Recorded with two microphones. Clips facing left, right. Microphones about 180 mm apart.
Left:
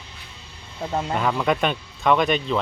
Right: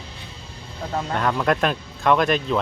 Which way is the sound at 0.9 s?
10° left (ahead or behind).